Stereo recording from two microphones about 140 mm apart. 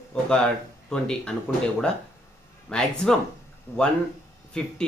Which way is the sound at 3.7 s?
20° left (ahead or behind).